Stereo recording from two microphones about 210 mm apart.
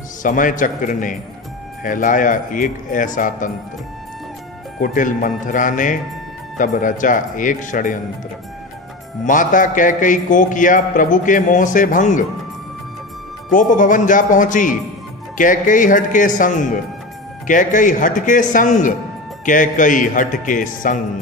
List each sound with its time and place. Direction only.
0.2 s a man's voice: 40° left (ahead or behind)
4.7 s a man's voice: 40° left (ahead or behind)
9.2 s a man's voice: 40° left (ahead or behind)
13.5 s a man's voice: 40° left (ahead or behind)